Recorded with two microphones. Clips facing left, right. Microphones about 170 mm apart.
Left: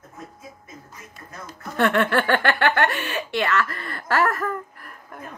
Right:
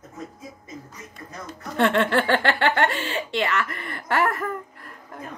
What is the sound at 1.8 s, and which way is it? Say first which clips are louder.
Speech: even; 25° right (ahead or behind).